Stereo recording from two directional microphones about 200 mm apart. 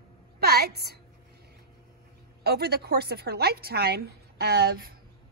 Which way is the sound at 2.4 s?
50° right (ahead or behind).